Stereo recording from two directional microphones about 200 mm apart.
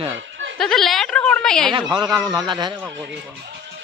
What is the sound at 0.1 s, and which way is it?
Snicker, 65° right (ahead or behind).